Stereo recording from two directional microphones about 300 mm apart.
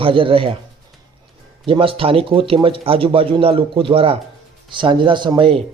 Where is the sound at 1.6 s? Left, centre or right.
Centre.